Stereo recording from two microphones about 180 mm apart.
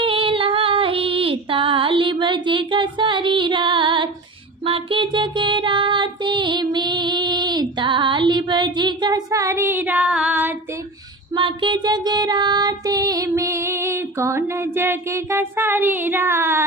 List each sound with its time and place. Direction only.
0.0 s female singing: 30° right (ahead or behind)
4.6 s music: 30° right (ahead or behind); by 10.5 s 5° right (ahead or behind)
11.3 s female singing: 25° right (ahead or behind)